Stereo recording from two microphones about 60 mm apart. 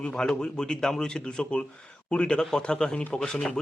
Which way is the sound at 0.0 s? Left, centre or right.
Centre.